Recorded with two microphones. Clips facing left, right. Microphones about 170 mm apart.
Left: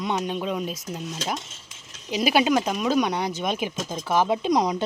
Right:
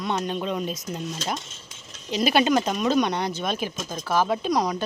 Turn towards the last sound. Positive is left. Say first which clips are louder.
# left 2 dB
turn(degrees=20)  # may be behind; listen again after turning